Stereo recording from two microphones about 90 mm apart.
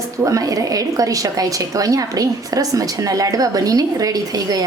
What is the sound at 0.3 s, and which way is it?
A woman's voice, 40° right (ahead or behind).